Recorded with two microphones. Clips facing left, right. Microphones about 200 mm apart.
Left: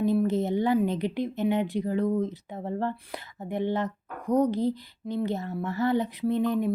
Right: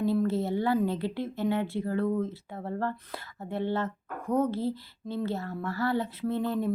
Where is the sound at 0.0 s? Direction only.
15° left (ahead or behind).